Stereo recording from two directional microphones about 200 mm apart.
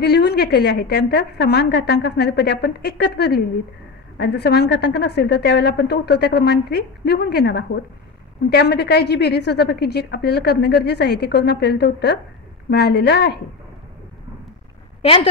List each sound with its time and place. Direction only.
0.0 s a woman's voice: 55° left (ahead or behind)
15.0 s a woman's voice: 30° left (ahead or behind)